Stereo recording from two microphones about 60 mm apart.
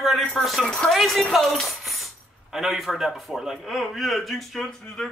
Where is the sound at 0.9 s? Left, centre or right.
Centre.